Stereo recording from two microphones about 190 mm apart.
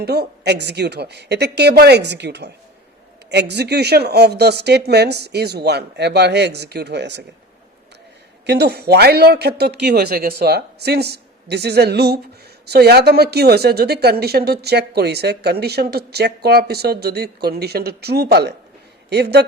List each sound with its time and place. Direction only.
0.0 s a woman's voice: 60° right (ahead or behind)
8.4 s a woman's voice: 60° right (ahead or behind)